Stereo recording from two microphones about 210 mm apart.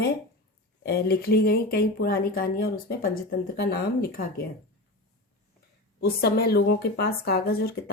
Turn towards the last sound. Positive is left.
turn(degrees=45)  # may be behind; listen again after turning